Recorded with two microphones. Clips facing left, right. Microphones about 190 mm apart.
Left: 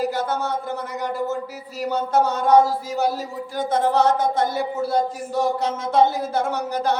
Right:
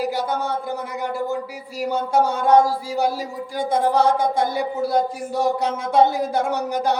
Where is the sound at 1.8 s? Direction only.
10° right (ahead or behind).